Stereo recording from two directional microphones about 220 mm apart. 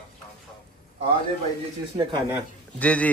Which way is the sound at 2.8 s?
5° left (ahead or behind).